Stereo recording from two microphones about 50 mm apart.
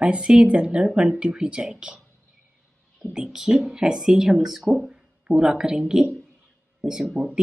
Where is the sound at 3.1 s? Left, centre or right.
Centre.